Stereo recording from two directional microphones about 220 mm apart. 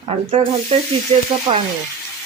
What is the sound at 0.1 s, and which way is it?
Snake, 25° right (ahead or behind).